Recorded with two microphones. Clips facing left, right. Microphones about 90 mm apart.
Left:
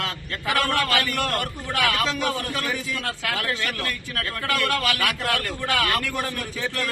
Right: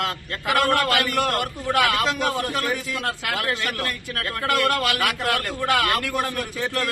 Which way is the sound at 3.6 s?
15° right (ahead or behind).